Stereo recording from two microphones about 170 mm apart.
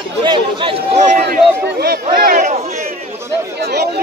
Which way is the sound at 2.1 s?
55° right (ahead or behind).